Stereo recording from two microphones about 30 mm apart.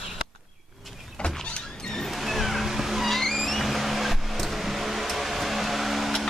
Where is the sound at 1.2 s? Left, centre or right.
Left.